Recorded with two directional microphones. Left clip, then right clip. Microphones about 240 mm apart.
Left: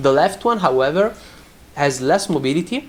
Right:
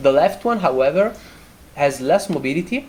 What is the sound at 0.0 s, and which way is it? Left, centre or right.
Speech, left.